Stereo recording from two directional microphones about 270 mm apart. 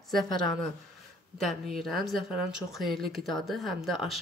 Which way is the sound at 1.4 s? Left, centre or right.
Centre.